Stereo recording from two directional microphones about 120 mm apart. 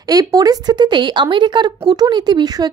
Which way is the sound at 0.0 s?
30° right (ahead or behind).